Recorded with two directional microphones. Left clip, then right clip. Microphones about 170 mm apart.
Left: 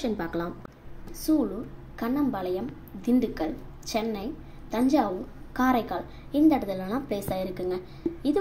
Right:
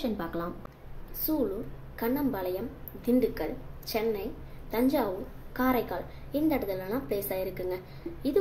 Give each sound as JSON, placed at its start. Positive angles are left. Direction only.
{"t": 0.0, "sound": "a woman's voice", "side_deg": 15}